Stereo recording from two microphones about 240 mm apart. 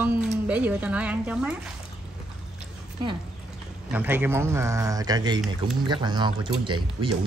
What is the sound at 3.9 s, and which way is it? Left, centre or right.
Speech, centre.